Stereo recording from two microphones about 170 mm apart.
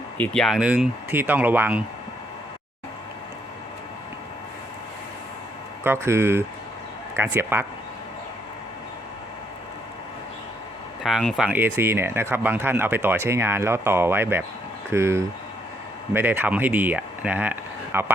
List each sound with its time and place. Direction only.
0.2 s speech: centre (ahead or behind)
5.8 s speech: 15° right (ahead or behind)
11.0 s speech: centre (ahead or behind)